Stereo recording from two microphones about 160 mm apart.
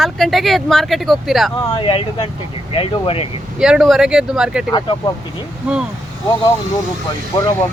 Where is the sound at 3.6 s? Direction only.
5° right (ahead or behind).